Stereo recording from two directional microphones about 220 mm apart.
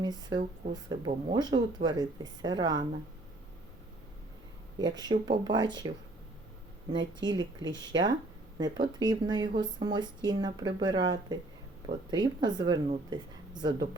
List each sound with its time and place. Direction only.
0.0 s speech: 20° right (ahead or behind)
4.8 s speech: 20° right (ahead or behind)
7.2 s speech: 20° right (ahead or behind)